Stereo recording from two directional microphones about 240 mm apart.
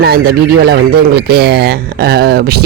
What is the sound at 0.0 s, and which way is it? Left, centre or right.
Speech, right.